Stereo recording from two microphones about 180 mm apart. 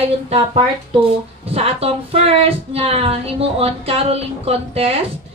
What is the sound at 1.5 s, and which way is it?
Speech, 35° right (ahead or behind).